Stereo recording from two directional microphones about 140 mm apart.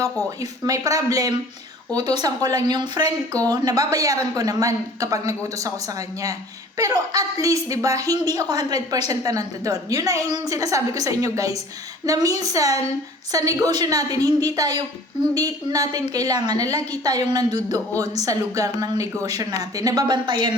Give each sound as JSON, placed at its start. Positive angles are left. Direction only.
{"t": 0.0, "sound": "a woman's voice", "side_deg": -25}
{"t": 6.7, "sound": "a woman's voice", "side_deg": -25}